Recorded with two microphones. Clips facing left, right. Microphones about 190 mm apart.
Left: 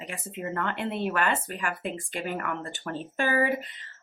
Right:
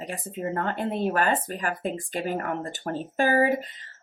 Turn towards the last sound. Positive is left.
turn(degrees=-40)  # may be behind; listen again after turning